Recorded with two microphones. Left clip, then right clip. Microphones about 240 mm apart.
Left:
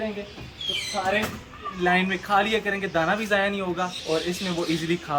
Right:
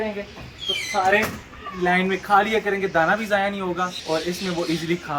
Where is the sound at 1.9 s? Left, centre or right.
Centre.